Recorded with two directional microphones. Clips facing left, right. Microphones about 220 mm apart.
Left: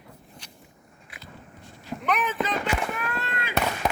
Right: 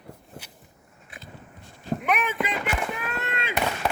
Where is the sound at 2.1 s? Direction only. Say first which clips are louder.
Left 1 dB; 10° right (ahead or behind).